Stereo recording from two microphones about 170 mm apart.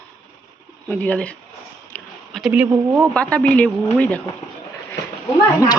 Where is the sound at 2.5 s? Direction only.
15° right (ahead or behind).